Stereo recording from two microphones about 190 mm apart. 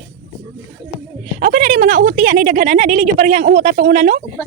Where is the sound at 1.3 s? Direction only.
45° right (ahead or behind).